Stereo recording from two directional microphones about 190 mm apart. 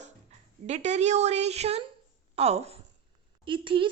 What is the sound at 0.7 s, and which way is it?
A woman's voice, 35° right (ahead or behind).